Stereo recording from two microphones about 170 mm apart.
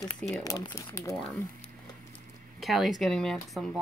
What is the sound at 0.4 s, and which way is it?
Speech, 20° left (ahead or behind).